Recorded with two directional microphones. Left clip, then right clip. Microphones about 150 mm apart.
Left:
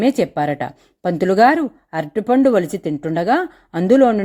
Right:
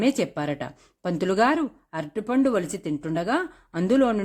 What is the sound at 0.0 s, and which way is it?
A woman's voice, 20° left (ahead or behind).